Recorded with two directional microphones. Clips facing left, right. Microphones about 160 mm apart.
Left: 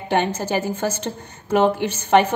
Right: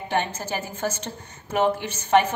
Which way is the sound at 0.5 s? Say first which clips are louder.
Left 6 dB; 75° left (ahead or behind).